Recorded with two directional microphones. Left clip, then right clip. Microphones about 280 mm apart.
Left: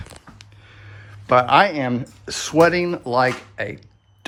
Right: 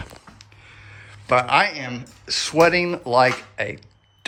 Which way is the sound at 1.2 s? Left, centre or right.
Centre.